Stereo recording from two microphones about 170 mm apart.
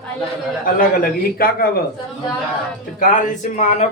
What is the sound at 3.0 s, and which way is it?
Speech, 50° left (ahead or behind).